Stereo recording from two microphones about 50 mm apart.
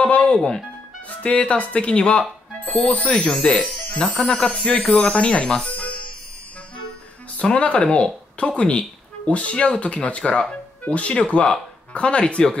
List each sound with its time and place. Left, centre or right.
0.0 s music: left
1.0 s speech: left
3.4 s speech: centre
4.3 s speech: left
7.4 s speech: left